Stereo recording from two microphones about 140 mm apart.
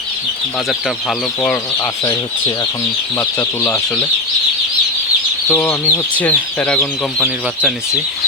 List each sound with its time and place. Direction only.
1.4 s speech: 15° left (ahead or behind)
5.5 s speech: 10° left (ahead or behind)